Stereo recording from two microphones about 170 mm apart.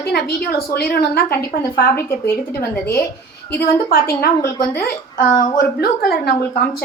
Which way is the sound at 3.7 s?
60° left (ahead or behind).